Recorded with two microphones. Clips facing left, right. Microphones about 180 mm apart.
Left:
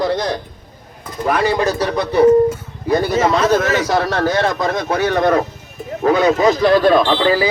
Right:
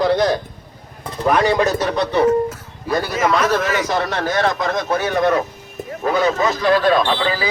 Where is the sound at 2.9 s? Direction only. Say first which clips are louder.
Left 3 dB; 30° left (ahead or behind).